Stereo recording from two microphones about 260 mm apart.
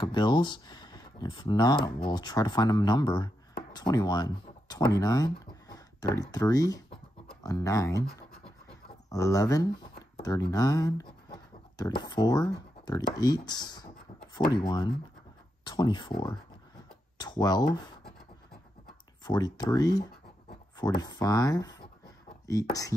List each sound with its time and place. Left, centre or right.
0.0 s speech: centre
9.1 s speech: centre
19.2 s speech: centre